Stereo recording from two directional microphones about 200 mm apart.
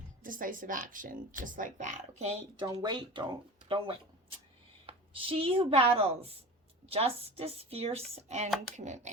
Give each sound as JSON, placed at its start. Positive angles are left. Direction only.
{"t": 0.2, "sound": "speech", "side_deg": -45}
{"t": 2.6, "sound": "speech", "side_deg": -20}